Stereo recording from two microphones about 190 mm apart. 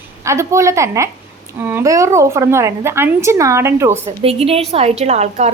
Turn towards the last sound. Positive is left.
turn(degrees=-35)  # may be behind; listen again after turning